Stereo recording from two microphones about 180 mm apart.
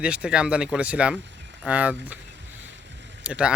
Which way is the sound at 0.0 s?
5° right (ahead or behind).